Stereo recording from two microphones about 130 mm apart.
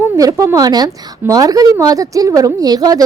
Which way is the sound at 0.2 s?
25° right (ahead or behind).